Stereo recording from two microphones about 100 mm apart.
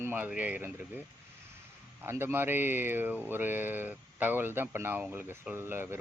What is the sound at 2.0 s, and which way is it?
Speech, 25° right (ahead or behind).